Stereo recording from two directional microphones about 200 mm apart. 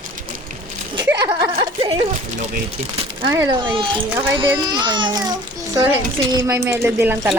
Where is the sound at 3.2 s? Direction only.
20° right (ahead or behind).